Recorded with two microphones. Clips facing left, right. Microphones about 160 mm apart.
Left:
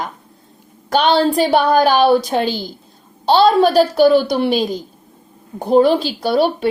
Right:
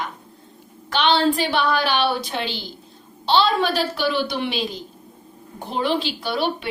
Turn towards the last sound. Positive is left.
turn(degrees=40)  # may be behind; listen again after turning